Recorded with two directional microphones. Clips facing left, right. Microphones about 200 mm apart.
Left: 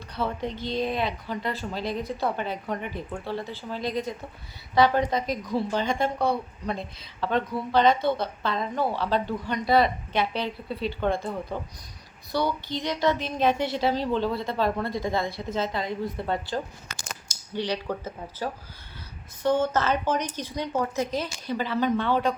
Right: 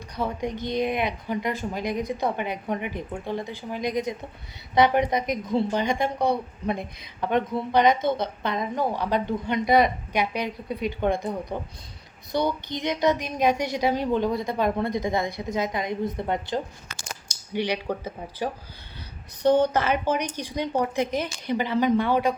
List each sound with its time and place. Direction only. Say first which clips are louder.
0.2 s a woman's voice: right 1 dB; 15° right (ahead or behind)